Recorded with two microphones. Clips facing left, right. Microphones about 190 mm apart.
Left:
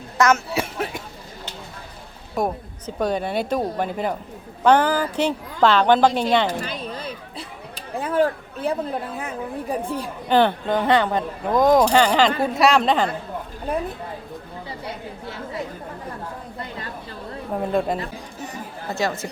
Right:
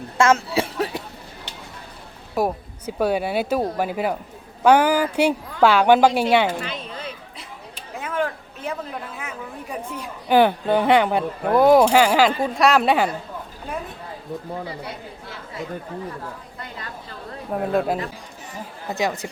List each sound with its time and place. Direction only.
0.2 s speech: 30° right (ahead or behind)
2.3 s speech: 5° right (ahead or behind)
6.5 s a sound: 40° left (ahead or behind)
10.2 s a woman's voice: 10° right (ahead or behind)
12.8 s speech: 10° right (ahead or behind)
17.7 s a woman's voice: 5° right (ahead or behind)
18.9 s speech: 15° right (ahead or behind)